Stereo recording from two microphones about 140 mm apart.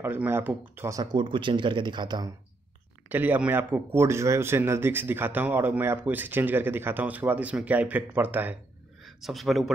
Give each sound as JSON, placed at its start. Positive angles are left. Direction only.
{"t": 0.0, "sound": "speech", "side_deg": -15}
{"t": 1.1, "sound": "speech", "side_deg": -35}
{"t": 3.1, "sound": "speech", "side_deg": -15}
{"t": 9.0, "sound": "speech", "side_deg": 0}